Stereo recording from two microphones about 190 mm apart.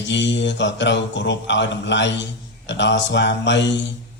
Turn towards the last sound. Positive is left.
turn(degrees=70)  # may be behind; listen again after turning